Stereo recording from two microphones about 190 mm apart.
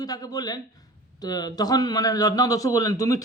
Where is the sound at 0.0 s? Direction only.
20° left (ahead or behind).